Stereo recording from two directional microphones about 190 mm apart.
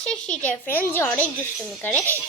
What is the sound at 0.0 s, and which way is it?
A child's voice, 5° left (ahead or behind).